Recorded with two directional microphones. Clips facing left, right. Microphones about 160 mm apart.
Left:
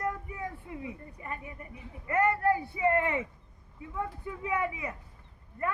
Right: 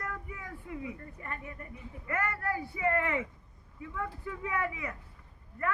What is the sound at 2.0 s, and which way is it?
A man's voice, 25° left (ahead or behind).